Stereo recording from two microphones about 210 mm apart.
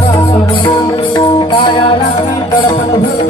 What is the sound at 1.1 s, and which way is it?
Music, 20° left (ahead or behind).